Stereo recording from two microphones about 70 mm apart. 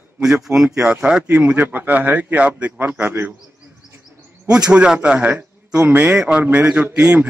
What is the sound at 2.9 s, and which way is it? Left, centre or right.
Speech, right.